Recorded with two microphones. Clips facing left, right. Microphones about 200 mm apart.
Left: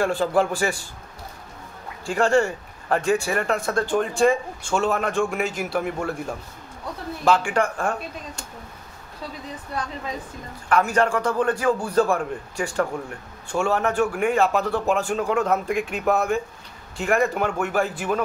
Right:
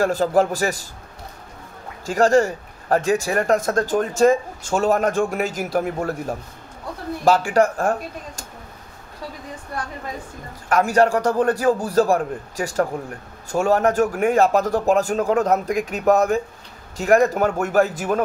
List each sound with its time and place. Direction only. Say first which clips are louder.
0.0 s a man's voice: right 3 dB; 40° right (ahead or behind)
2.0 s a man's voice: right 3 dB; 40° right (ahead or behind)
10.7 s a man's voice: right 3 dB; 40° right (ahead or behind)